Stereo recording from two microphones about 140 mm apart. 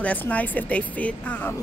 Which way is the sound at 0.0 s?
10° left (ahead or behind).